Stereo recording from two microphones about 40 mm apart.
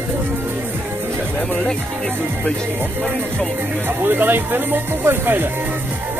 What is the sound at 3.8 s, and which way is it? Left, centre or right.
Speech, right.